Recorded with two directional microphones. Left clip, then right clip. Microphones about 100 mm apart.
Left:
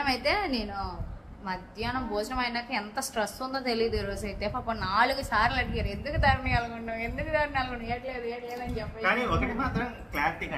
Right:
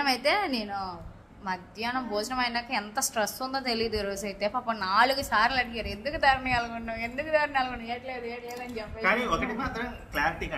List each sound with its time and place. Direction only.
0.0 s a woman's voice: 40° right (ahead or behind)
7.9 s a woman's voice: 25° right (ahead or behind)
9.0 s a woman's voice: 15° left (ahead or behind)